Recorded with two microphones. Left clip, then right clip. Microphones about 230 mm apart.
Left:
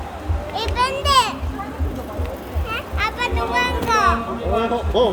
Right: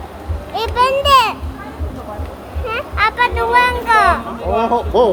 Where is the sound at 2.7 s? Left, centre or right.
Centre.